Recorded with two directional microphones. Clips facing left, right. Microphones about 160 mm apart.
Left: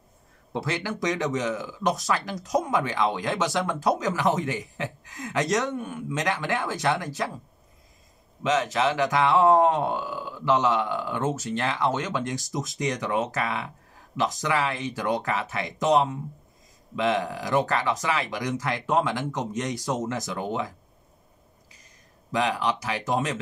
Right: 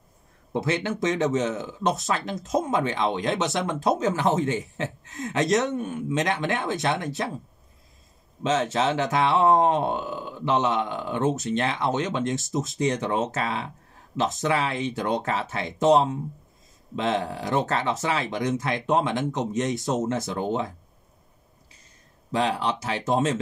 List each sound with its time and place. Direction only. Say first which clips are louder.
0.5 s speech: right 4 dB; 20° right (ahead or behind)
8.5 s speech: even; 25° right (ahead or behind)
22.3 s speech: right 1 dB; 30° right (ahead or behind)